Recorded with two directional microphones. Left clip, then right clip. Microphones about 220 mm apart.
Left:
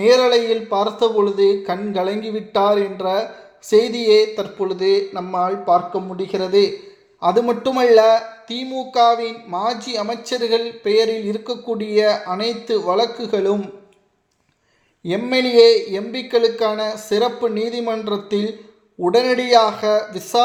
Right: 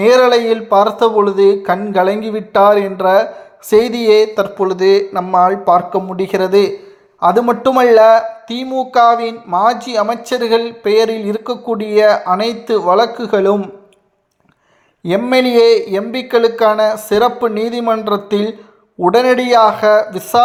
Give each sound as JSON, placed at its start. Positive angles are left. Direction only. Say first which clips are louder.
{"t": 0.0, "sound": "a man's voice", "louder": "right 4 dB", "side_deg": -20}
{"t": 15.0, "sound": "a man's voice", "louder": "right 6 dB", "side_deg": -20}